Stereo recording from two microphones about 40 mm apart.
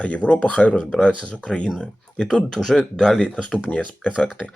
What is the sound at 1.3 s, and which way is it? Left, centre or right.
Speech, left.